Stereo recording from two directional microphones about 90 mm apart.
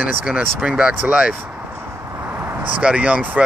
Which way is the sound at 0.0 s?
15° right (ahead or behind).